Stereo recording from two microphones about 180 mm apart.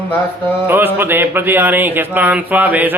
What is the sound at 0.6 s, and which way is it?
Speech, 10° right (ahead or behind).